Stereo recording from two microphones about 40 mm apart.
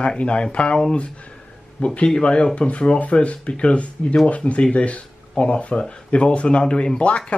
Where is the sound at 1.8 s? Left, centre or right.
Left.